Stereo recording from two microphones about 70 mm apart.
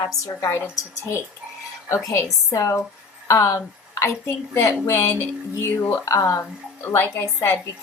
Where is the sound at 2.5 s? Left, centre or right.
Left.